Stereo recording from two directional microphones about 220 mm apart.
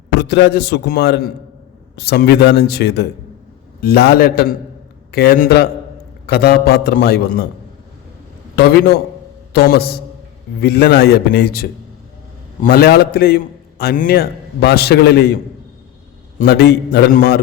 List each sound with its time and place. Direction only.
0.2 s a man's voice: 50° left (ahead or behind)
8.5 s a man's voice: 45° left (ahead or behind)
16.4 s a man's voice: 45° left (ahead or behind)